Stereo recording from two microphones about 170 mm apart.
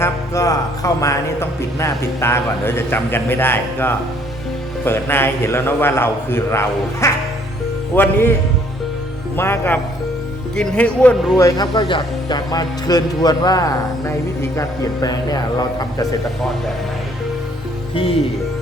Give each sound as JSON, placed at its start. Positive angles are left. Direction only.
{"t": 0.0, "sound": "speech", "side_deg": 20}
{"t": 9.3, "sound": "speech", "side_deg": 15}
{"t": 11.3, "sound": "speech", "side_deg": 20}
{"t": 17.9, "sound": "music", "side_deg": 35}